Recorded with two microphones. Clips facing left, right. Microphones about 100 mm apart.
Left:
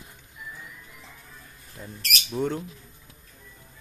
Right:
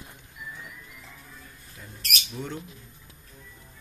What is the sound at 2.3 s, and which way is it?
Speech, 45° left (ahead or behind).